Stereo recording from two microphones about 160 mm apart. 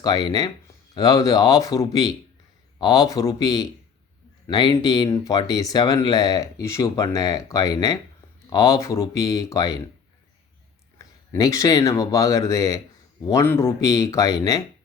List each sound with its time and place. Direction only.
0.0 s speech: 25° left (ahead or behind)
10.9 s speech: 20° left (ahead or behind)